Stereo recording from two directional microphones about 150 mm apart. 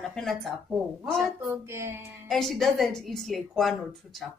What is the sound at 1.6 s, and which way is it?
Speech, 15° right (ahead or behind).